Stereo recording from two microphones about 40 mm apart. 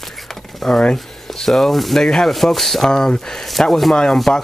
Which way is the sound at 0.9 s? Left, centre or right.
Centre.